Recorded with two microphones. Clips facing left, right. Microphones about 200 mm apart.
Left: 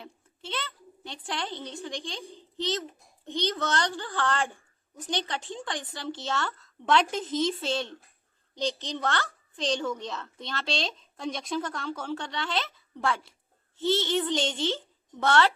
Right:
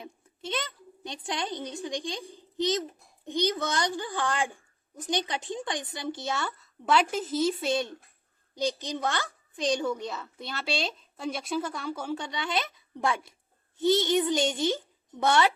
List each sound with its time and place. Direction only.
0.0 s a child's voice: 15° right (ahead or behind)